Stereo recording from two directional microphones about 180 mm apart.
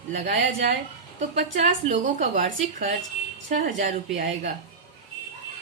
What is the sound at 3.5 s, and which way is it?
Speech, 45° right (ahead or behind).